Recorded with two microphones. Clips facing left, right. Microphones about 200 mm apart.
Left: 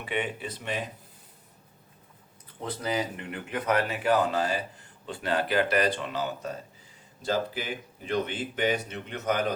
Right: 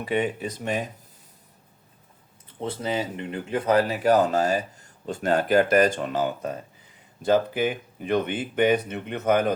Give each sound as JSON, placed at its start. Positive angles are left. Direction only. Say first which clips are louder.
{"t": 0.0, "sound": "speech", "louder": "right 6 dB", "side_deg": -40}
{"t": 2.6, "sound": "speech", "louder": "right 3 dB", "side_deg": -25}